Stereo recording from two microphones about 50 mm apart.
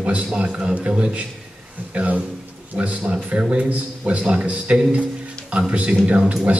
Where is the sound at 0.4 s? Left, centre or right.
Centre.